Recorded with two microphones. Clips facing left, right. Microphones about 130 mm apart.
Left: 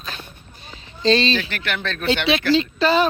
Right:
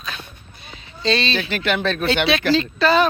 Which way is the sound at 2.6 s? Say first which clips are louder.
Right 1 dB; 30° left (ahead or behind).